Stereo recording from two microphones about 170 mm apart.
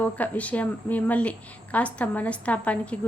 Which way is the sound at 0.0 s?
10° left (ahead or behind).